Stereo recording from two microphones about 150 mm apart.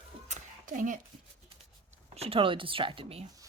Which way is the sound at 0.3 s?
60° right (ahead or behind).